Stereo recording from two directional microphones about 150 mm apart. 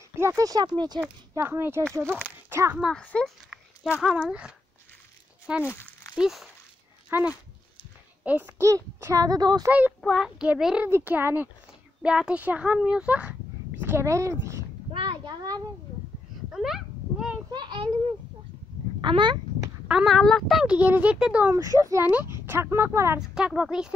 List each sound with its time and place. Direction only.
0.1 s speech: 20° right (ahead or behind)
1.3 s speech: 15° right (ahead or behind)
2.8 s speech: 5° left (ahead or behind)
4.3 s speech: 5° right (ahead or behind)
5.6 s crumpling: 15° left (ahead or behind)
6.1 s speech: 5° right (ahead or behind); by 9.7 s 25° right (ahead or behind)
9.7 s a child's voice: 10° right (ahead or behind)
14.9 s a sound: 35° right (ahead or behind)
16.5 s a sound: centre (ahead or behind)
17.5 s speech: 30° right (ahead or behind)
18.9 s speech: 30° right (ahead or behind)
19.9 s speech: centre (ahead or behind)
21.5 s speech: 20° right (ahead or behind)
23.3 s a child's voice: 5° right (ahead or behind)